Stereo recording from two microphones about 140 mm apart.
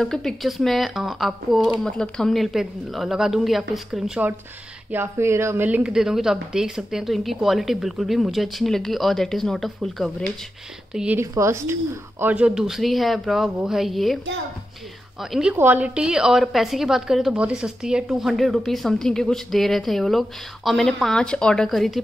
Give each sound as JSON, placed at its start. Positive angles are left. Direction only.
{"t": 0.0, "sound": "a woman's voice", "side_deg": 5}
{"t": 11.1, "sound": "a woman's voice", "side_deg": -20}
{"t": 15.5, "sound": "a woman's voice", "side_deg": -15}